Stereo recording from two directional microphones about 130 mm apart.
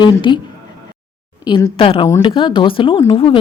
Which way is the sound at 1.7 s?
45° left (ahead or behind).